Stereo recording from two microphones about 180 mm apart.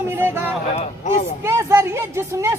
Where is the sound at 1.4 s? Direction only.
15° right (ahead or behind).